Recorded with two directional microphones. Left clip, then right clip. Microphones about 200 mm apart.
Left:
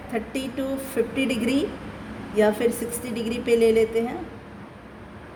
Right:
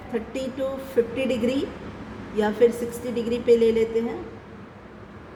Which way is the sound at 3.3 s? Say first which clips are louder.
Right 1 dB; 60° left (ahead or behind).